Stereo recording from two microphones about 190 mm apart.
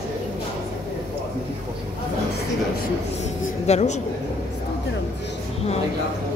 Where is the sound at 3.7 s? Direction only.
35° left (ahead or behind).